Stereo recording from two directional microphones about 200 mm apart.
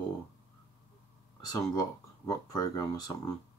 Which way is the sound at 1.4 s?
20° left (ahead or behind).